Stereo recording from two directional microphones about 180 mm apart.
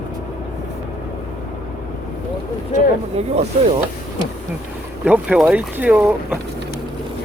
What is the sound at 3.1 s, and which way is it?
Speech, 35° right (ahead or behind).